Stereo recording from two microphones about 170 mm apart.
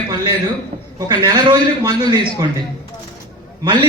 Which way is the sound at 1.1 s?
25° right (ahead or behind).